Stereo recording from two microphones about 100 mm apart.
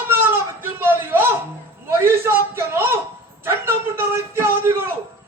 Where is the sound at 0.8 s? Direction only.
20° right (ahead or behind).